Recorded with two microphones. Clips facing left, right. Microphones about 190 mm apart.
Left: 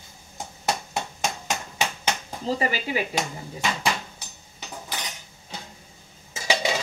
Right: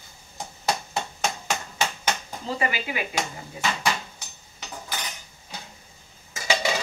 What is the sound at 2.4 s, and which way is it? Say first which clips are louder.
Speech: left 2 dB; 35° left (ahead or behind).